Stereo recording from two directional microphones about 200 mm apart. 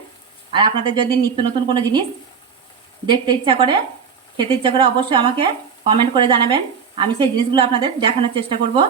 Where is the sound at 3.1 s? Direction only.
25° right (ahead or behind).